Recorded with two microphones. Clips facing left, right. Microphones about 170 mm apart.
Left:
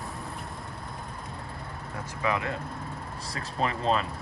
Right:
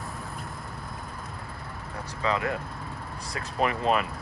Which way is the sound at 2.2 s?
20° left (ahead or behind).